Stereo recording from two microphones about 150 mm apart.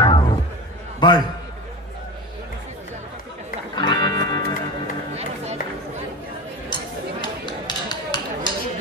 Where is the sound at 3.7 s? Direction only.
30° left (ahead or behind).